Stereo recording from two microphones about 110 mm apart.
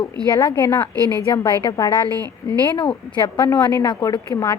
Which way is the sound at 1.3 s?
40° left (ahead or behind).